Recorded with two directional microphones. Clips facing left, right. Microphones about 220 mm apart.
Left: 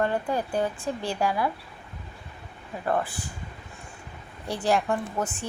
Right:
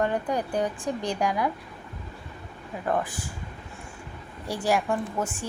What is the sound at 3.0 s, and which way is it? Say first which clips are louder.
Speech: even; 15° right (ahead or behind).